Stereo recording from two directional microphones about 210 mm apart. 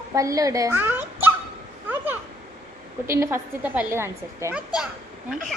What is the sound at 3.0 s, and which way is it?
A woman's voice, 10° right (ahead or behind).